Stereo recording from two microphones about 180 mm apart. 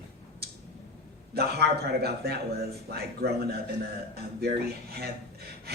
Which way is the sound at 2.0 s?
60° right (ahead or behind).